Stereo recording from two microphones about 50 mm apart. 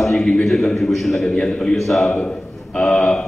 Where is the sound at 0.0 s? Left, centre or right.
Centre.